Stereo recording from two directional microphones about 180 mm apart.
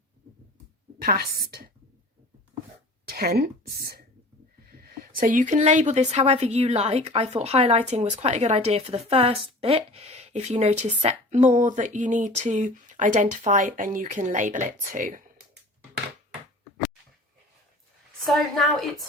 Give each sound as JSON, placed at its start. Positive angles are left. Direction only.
{"t": 1.0, "sound": "a woman's voice", "side_deg": -55}
{"t": 3.1, "sound": "a woman's voice", "side_deg": -60}
{"t": 18.3, "sound": "a woman's voice", "side_deg": 0}